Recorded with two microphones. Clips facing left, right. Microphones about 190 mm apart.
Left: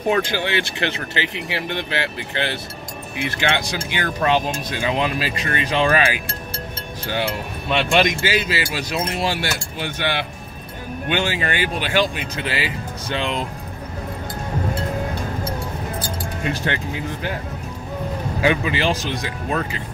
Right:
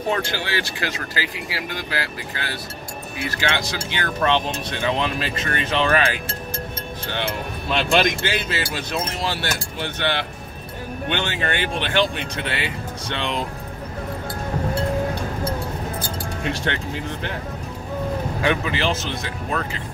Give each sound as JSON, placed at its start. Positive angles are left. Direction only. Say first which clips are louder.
{"t": 0.2, "sound": "speech", "louder": "left 4 dB", "side_deg": 20}
{"t": 16.4, "sound": "speech", "louder": "left 2 dB", "side_deg": 5}
{"t": 18.4, "sound": "speech", "louder": "left 3 dB", "side_deg": 10}